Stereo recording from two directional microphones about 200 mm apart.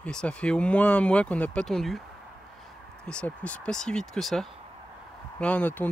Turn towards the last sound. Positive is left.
turn(degrees=10)  # may be behind; listen again after turning